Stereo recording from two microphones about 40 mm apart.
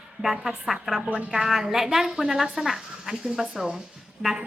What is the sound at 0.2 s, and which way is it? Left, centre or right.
Speech, centre.